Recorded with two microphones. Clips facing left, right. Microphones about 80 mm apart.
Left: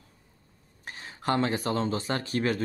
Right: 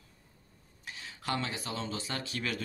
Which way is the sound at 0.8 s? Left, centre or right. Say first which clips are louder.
Left 7 dB; left.